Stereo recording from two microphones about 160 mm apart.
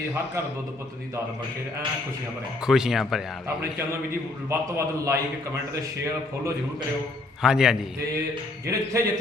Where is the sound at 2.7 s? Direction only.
5° right (ahead or behind).